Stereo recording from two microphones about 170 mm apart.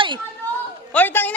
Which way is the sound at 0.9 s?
10° left (ahead or behind).